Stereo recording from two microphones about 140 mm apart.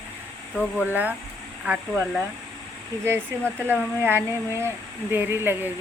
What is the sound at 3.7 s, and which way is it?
Speech, 15° right (ahead or behind).